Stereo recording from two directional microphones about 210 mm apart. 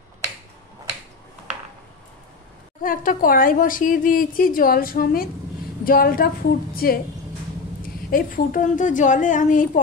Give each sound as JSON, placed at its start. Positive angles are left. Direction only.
{"t": 2.8, "sound": "speech", "side_deg": 40}
{"t": 8.1, "sound": "speech", "side_deg": 40}